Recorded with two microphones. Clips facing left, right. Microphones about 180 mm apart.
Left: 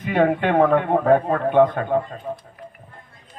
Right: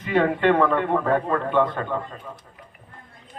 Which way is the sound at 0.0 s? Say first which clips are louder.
Left 1 dB; 50° left (ahead or behind).